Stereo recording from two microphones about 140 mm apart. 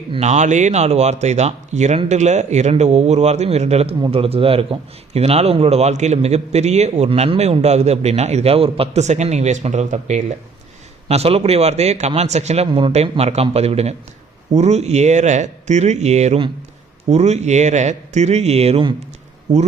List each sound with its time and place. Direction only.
0.2 s a man's voice: 55° right (ahead or behind)
11.1 s a man's voice: 45° right (ahead or behind)